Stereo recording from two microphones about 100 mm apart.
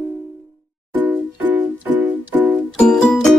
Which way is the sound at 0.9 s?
15° right (ahead or behind).